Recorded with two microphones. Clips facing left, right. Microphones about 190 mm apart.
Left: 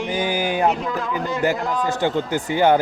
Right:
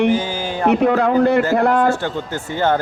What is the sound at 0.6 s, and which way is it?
A man's voice, 65° right (ahead or behind).